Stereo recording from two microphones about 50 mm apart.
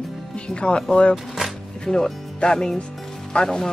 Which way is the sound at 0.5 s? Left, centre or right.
Centre.